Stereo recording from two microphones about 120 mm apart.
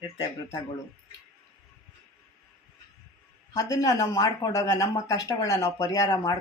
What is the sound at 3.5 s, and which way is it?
Speech, 25° left (ahead or behind).